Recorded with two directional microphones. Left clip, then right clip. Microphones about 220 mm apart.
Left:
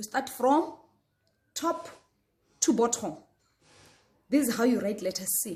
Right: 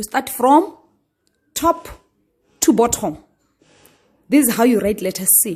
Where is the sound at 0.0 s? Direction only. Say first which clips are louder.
Right 10 dB; 45° right (ahead or behind).